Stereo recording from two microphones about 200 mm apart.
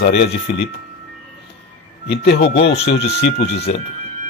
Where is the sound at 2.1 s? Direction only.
55° left (ahead or behind).